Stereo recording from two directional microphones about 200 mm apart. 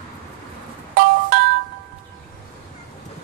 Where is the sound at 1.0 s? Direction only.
50° right (ahead or behind).